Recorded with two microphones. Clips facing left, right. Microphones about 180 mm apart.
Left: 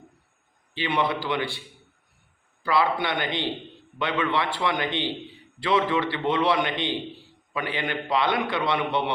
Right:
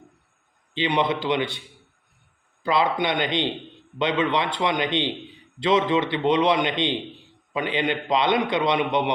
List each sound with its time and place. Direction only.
0.7 s a man's voice: 20° right (ahead or behind)
2.6 s a man's voice: 20° right (ahead or behind)